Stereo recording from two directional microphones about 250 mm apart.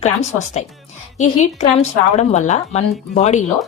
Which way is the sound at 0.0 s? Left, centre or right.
Left.